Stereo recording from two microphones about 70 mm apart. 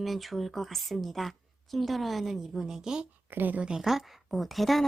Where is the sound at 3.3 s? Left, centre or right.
Right.